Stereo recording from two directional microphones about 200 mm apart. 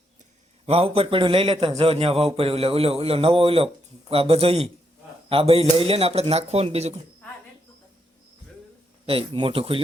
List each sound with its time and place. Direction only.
0.6 s a man's voice: 30° right (ahead or behind)
9.0 s a man's voice: 25° right (ahead or behind)